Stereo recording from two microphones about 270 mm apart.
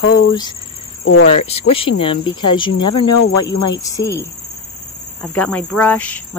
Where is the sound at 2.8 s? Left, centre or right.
Left.